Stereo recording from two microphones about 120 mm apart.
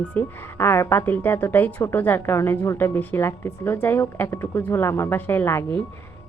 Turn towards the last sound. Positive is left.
turn(degrees=20)  # may be behind; listen again after turning